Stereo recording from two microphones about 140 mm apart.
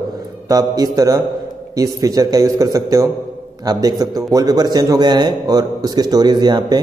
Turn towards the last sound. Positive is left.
turn(degrees=-30)  # may be behind; listen again after turning